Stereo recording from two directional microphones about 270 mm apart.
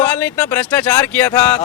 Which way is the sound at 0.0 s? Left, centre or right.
Centre.